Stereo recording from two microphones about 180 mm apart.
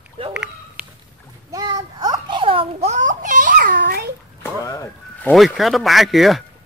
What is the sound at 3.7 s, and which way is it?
Babbling, 55° right (ahead or behind).